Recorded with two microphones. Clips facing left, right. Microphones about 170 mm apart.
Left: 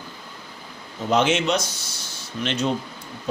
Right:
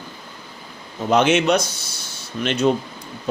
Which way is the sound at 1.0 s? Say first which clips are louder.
Right 4 dB; 60° right (ahead or behind).